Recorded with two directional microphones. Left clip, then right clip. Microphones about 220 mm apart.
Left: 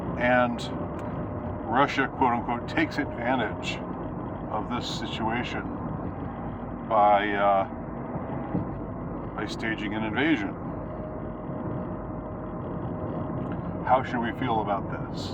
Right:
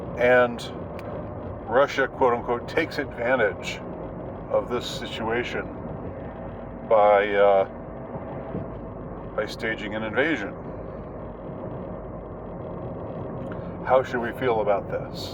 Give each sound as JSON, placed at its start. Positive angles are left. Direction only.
{"t": 0.2, "sound": "speech", "side_deg": 15}
{"t": 1.7, "sound": "speech", "side_deg": 15}
{"t": 5.3, "sound": "speech", "side_deg": 15}
{"t": 6.8, "sound": "speech", "side_deg": 20}
{"t": 9.3, "sound": "speech", "side_deg": 15}
{"t": 13.8, "sound": "speech", "side_deg": 10}